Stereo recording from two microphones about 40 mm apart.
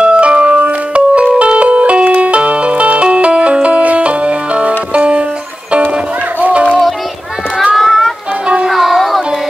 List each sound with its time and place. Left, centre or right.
0.0 s music: right
6.4 s music: right
7.7 s music: centre